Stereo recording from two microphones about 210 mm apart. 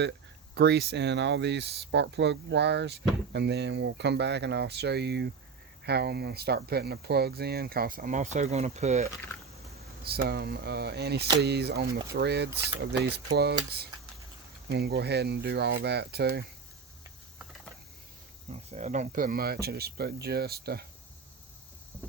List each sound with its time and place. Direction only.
0.5 s speech: 50° right (ahead or behind); by 9.0 s 35° right (ahead or behind)
10.0 s speech: 50° right (ahead or behind)
18.5 s speech: 35° right (ahead or behind); by 20.8 s 50° right (ahead or behind)